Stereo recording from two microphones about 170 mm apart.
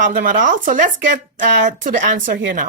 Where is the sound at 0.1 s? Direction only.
55° right (ahead or behind).